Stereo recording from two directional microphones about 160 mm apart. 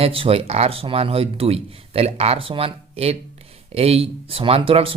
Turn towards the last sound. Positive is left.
turn(degrees=-35)  # may be behind; listen again after turning